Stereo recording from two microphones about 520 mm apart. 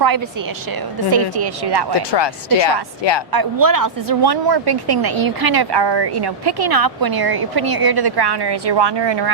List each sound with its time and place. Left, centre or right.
1.4 s a woman's voice: right
2.0 s speech: left
3.3 s a woman's voice: right